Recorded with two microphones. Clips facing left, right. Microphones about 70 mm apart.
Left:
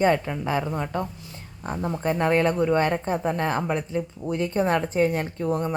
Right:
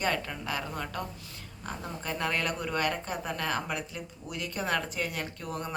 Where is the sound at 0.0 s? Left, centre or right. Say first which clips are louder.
Left 10 dB; left.